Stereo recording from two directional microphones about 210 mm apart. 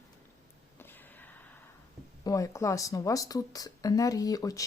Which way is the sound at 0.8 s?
10° left (ahead or behind).